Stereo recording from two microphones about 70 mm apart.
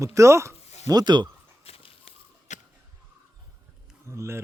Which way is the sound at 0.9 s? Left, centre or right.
Right.